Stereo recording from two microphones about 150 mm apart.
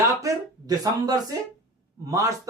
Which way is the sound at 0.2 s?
25° right (ahead or behind).